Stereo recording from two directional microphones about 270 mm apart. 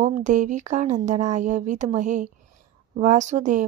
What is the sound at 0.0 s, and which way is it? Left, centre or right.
Speech, right.